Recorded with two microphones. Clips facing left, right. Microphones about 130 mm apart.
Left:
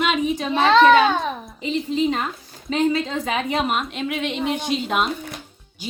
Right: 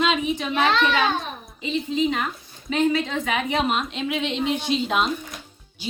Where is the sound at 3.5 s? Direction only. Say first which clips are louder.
Left 1 dB; 5° left (ahead or behind).